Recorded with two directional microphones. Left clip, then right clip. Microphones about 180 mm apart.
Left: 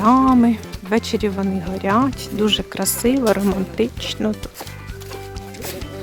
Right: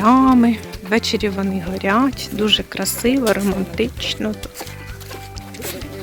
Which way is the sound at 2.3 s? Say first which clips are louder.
Right 2 dB; 15° left (ahead or behind).